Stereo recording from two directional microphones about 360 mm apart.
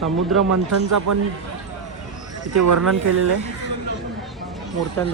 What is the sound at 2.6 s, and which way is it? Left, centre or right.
Speech, right.